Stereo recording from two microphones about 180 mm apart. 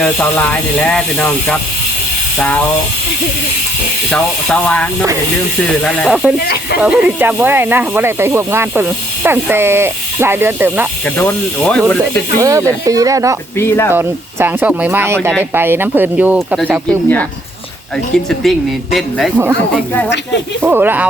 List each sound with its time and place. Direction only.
0.0 s speech: 5° left (ahead or behind)
4.1 s speech: 5° left (ahead or behind)
6.4 s speech: 65° left (ahead or behind)
6.8 s speech: 5° right (ahead or behind)
11.0 s speech: 5° left (ahead or behind)
12.4 s speech: 20° right (ahead or behind)
13.6 s speech: 15° left (ahead or behind)
13.9 s speech: 10° right (ahead or behind)
18.3 s speech: centre (ahead or behind)
20.6 s speech: 10° right (ahead or behind)